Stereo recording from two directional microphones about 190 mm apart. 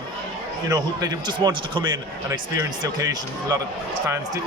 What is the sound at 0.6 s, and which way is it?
Speech, 20° right (ahead or behind).